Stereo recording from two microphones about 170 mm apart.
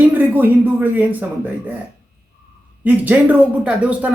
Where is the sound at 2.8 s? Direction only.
10° right (ahead or behind).